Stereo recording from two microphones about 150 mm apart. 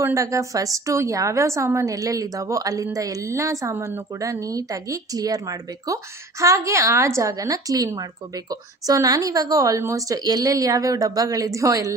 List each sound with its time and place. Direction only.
0.0 s a woman's voice: 20° right (ahead or behind)